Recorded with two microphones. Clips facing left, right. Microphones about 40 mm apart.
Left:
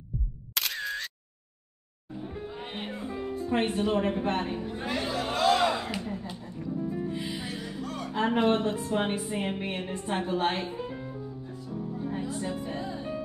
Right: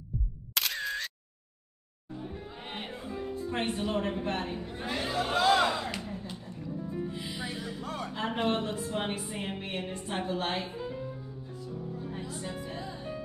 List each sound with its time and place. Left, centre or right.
0.1 s music: centre
0.6 s single-lens reflex camera: centre
2.2 s music: centre
2.5 s music: centre
3.9 s a woman's voice: centre
4.3 s a sound: centre
6.4 s music: centre
7.8 s music: centre
8.1 s music: centre
8.6 s a woman's voice: centre
10.8 s music: centre
11.5 s music: centre